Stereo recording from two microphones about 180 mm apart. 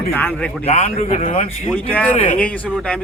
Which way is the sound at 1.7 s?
10° left (ahead or behind).